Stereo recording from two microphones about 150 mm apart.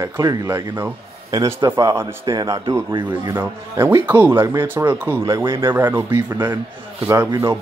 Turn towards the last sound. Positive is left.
turn(degrees=-20)  # may be behind; listen again after turning